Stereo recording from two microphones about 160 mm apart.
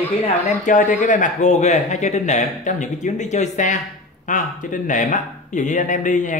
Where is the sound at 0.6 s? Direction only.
55° left (ahead or behind).